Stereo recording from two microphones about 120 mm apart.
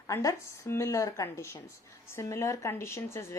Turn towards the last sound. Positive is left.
turn(degrees=25)  # may be behind; listen again after turning